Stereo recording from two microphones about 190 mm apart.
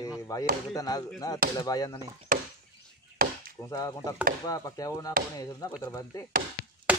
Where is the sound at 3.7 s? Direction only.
20° left (ahead or behind).